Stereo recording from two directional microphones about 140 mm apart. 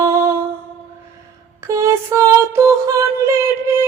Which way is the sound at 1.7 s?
20° right (ahead or behind).